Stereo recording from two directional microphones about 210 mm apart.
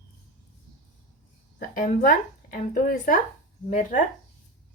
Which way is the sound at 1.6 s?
40° left (ahead or behind).